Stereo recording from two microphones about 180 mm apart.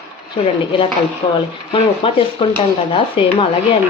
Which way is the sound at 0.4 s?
30° left (ahead or behind).